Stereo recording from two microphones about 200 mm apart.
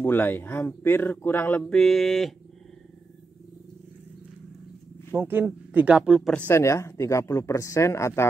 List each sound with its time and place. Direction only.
0.0 s speech: 10° left (ahead or behind)
5.1 s speech: 10° right (ahead or behind); by 8.3 s 15° left (ahead or behind)